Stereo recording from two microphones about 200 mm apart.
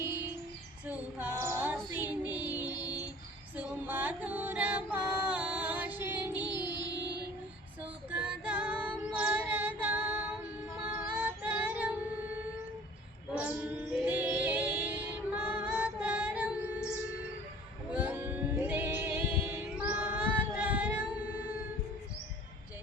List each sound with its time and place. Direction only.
0.9 s female singing: 10° right (ahead or behind)
2.6 s music: 20° left (ahead or behind)
3.6 s music: 10° right (ahead or behind)
6.3 s music: 20° left (ahead or behind)
7.0 s child singing: 60° right (ahead or behind)
8.1 s female singing: 5° right (ahead or behind)
9.8 s music: 10° right (ahead or behind)
13.3 s female singing: 10° right (ahead or behind)
17.9 s music: 5° right (ahead or behind)